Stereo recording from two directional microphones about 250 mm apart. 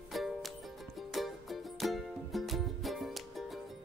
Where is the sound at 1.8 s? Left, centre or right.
Centre.